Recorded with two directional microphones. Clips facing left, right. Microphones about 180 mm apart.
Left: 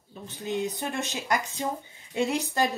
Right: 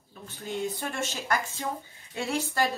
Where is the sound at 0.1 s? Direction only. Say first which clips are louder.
Left 4 dB; 20° left (ahead or behind).